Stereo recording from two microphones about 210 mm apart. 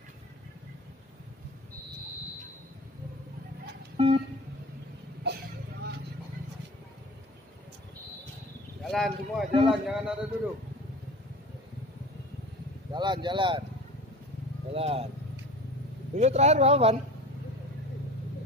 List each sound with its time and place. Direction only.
3.9 s guitar: 25° right (ahead or behind)
5.2 s vehicle: 55° right (ahead or behind)
8.8 s a man's voice: centre (ahead or behind)
12.9 s speech: 20° right (ahead or behind)
14.7 s speech: 30° right (ahead or behind)
16.2 s speech: 30° right (ahead or behind)